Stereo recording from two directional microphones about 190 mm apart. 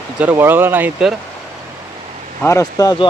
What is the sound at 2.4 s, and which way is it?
Speech, 15° left (ahead or behind).